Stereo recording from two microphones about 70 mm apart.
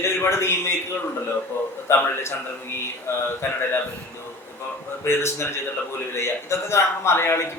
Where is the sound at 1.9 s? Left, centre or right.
Left.